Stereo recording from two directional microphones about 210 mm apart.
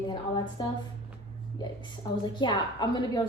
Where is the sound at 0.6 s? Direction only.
20° left (ahead or behind).